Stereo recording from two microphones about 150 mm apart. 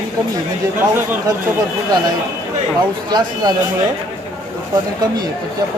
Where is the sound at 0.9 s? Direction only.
15° right (ahead or behind).